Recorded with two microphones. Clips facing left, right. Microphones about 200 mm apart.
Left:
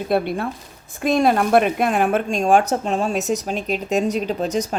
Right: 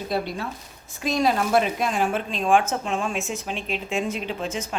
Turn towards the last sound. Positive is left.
turn(degrees=40)  # may be behind; listen again after turning